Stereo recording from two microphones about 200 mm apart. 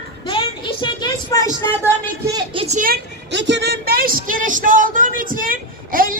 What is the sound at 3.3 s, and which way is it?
Speech, 60° right (ahead or behind).